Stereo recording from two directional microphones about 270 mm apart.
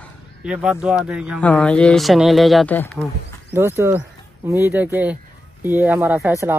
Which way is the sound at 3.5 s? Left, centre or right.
Centre.